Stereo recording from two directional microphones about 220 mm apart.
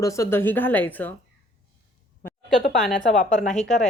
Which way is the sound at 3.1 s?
35° left (ahead or behind).